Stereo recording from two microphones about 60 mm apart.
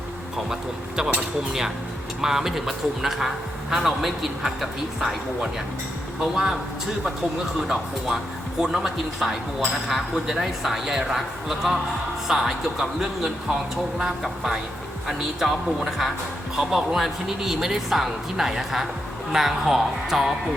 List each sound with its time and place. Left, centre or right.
0.5 s a man's voice: centre
2.2 s a man's voice: centre
7.7 s a man's voice: centre